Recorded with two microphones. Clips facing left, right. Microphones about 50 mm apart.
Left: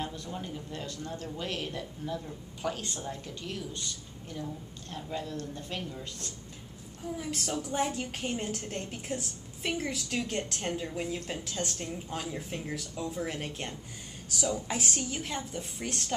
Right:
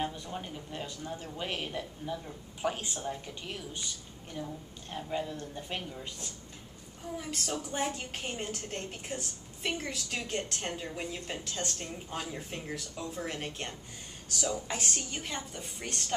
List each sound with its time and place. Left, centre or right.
0.0 s speech: centre
7.2 s a woman's voice: centre